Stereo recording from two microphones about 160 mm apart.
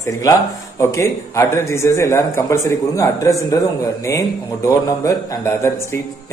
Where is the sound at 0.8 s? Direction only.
15° left (ahead or behind).